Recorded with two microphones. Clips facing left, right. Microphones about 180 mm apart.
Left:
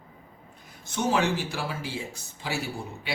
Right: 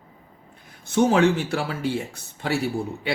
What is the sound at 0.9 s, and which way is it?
Speech, 60° right (ahead or behind).